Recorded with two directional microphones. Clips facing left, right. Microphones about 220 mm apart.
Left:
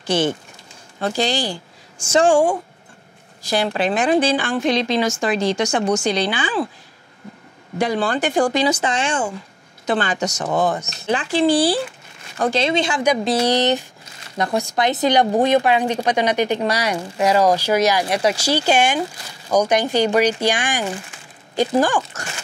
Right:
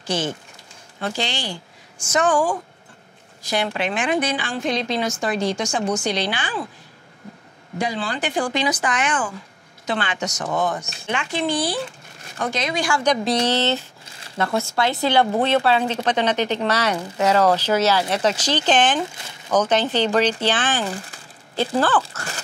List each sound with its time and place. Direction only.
0.0 s speech: 60° left (ahead or behind)
1.0 s speech: 40° left (ahead or behind)
4.6 s a woman's voice: 90° left; by 6.6 s 70° left (ahead or behind)
7.8 s speech: 60° left (ahead or behind); by 8.6 s 45° left (ahead or behind)
8.6 s speech: 25° left (ahead or behind)
9.8 s speech: 40° left (ahead or behind); by 13.0 s 25° left (ahead or behind)
13.0 s a woman's voice: 5° left (ahead or behind)
13.5 s a woman's voice: 15° left (ahead or behind)